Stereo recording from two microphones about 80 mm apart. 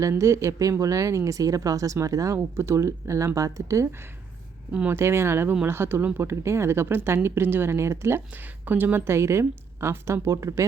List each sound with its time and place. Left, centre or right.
0.0 s speech: right
4.9 s speech: right